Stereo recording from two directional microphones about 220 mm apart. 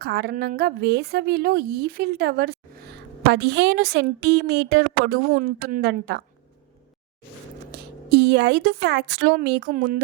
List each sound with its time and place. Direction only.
0.0 s a woman's voice: 45° right (ahead or behind)
7.7 s a woman's voice: 45° right (ahead or behind)